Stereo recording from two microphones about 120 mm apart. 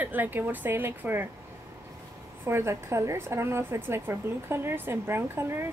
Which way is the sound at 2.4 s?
20° right (ahead or behind).